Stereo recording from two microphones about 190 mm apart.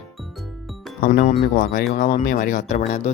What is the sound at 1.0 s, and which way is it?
Speech, 45° left (ahead or behind).